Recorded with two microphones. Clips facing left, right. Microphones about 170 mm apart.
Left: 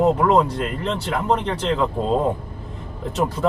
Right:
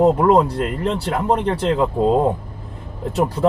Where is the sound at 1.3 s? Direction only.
45° right (ahead or behind).